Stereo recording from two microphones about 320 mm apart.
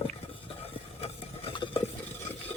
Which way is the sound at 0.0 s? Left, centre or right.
Centre.